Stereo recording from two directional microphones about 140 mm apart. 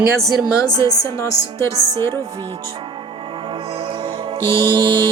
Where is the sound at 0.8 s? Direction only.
20° left (ahead or behind).